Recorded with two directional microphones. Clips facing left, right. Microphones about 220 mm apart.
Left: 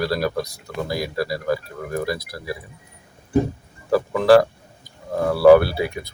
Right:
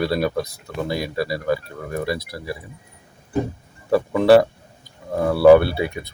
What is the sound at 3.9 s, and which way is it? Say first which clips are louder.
Speech: right 1 dB; centre (ahead or behind).